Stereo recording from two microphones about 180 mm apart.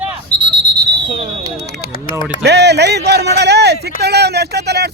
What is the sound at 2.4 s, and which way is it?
Speech, 70° right (ahead or behind).